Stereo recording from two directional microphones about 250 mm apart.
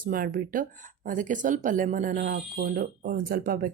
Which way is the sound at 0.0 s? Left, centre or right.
Right.